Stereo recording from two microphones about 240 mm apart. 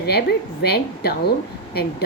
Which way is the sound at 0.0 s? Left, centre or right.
Left.